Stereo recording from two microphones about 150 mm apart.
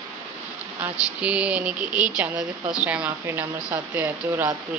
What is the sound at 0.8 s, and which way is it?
A woman's voice, 10° right (ahead or behind).